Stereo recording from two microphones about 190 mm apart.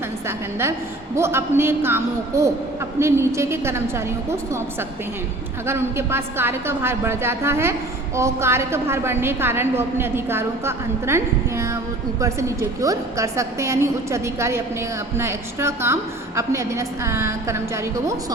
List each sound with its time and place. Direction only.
1.1 s a woman's voice: 15° right (ahead or behind)